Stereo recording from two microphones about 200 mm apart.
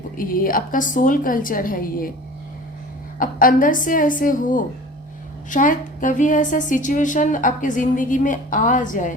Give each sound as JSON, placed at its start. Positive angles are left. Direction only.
{"t": 0.2, "sound": "a woman's voice", "side_deg": 45}
{"t": 3.2, "sound": "a woman's voice", "side_deg": 45}